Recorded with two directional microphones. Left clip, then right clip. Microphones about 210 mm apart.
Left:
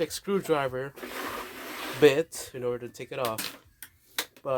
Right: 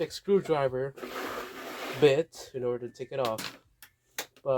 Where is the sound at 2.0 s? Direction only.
40° left (ahead or behind).